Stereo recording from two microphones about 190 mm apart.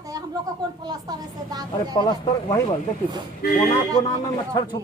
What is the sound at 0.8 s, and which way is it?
A woman's voice, 20° right (ahead or behind).